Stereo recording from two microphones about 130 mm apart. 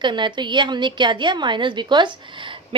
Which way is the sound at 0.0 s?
35° right (ahead or behind).